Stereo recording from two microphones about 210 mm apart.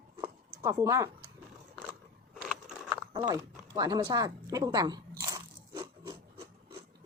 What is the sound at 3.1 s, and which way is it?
Speech, 20° right (ahead or behind).